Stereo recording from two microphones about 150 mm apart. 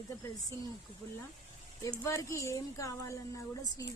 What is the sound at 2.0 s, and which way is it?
Speech, 20° left (ahead or behind).